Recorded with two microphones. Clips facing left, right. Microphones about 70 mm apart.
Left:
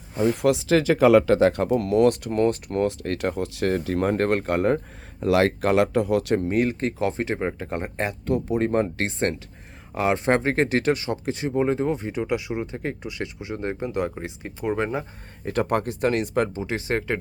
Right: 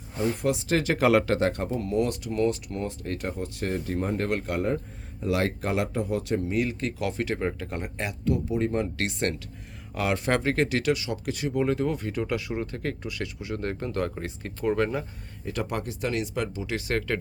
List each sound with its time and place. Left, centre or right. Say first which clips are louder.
0.3 s speech: left 7 dB; left
1.5 s speech: left 6 dB; left
2.8 s speech: left 7 dB; left
4.1 s speech: left 6 dB; left
5.2 s speech: left 7 dB; left
6.5 s speech: left 5 dB; left
9.0 s speech: left 3 dB; left
15.4 s speech: left 7 dB; left